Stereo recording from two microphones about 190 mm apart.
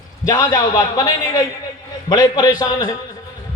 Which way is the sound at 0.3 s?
20° left (ahead or behind).